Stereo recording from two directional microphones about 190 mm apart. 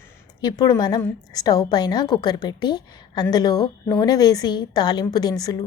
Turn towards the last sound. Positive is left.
turn(degrees=20)  # may be behind; listen again after turning